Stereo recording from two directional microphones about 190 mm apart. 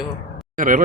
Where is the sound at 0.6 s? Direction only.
45° right (ahead or behind).